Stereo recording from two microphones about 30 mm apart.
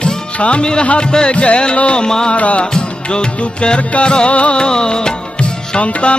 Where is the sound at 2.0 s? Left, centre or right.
Left.